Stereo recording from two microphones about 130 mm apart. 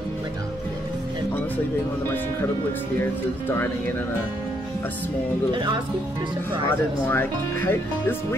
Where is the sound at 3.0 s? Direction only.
15° left (ahead or behind).